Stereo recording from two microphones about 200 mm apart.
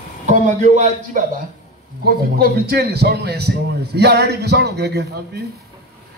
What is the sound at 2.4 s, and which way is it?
A man's voice, 55° right (ahead or behind).